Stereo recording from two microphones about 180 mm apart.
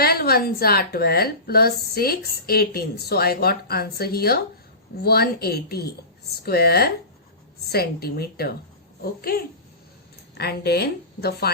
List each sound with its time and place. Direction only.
0.0 s a woman's voice: 60° left (ahead or behind)